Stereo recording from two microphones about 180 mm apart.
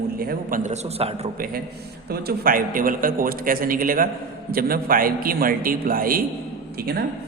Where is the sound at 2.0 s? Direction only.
55° right (ahead or behind).